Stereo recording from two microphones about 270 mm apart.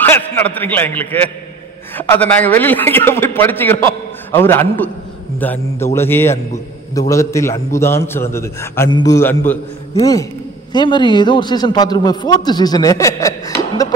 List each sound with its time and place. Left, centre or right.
0.0 s a man's voice: centre